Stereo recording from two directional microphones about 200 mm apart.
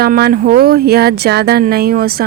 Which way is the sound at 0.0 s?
50° right (ahead or behind).